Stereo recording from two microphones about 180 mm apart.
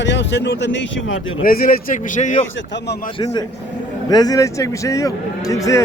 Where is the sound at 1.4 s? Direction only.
55° left (ahead or behind).